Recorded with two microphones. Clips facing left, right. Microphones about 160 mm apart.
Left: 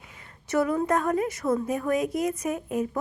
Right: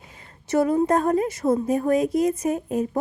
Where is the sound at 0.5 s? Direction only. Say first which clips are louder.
Right 4 dB; 30° right (ahead or behind).